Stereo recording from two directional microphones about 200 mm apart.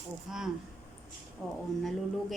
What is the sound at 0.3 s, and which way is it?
Speech, 5° right (ahead or behind).